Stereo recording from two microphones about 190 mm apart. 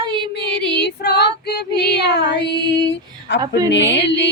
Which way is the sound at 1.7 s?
60° left (ahead or behind).